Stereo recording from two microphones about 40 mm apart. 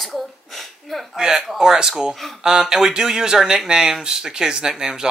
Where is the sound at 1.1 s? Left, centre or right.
Centre.